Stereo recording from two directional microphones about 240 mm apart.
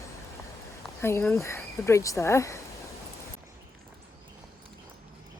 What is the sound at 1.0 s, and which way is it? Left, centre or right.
Speech, centre.